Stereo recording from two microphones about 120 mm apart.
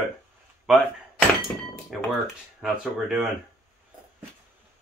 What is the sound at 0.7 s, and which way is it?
Speech, 5° right (ahead or behind).